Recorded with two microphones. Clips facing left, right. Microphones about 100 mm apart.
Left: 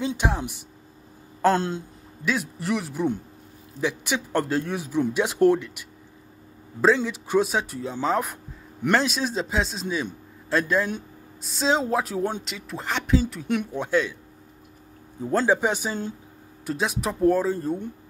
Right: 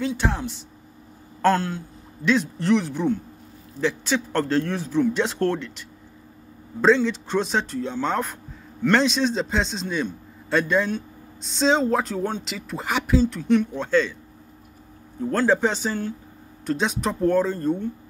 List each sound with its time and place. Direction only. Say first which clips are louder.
0.0 s speech: right 1 dB; 15° left (ahead or behind)
2.2 s a man's voice: right 6 dB; 5° left (ahead or behind)
12.4 s a man's voice: right 2 dB; centre (ahead or behind)
13.2 s speech: right 6 dB; 5° left (ahead or behind)
15.3 s speech: right 1 dB; 10° left (ahead or behind)
16.6 s a man's voice: right 2 dB; 5° left (ahead or behind)